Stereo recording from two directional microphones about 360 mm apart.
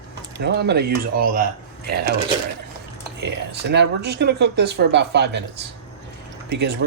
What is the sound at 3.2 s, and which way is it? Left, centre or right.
Speech, right.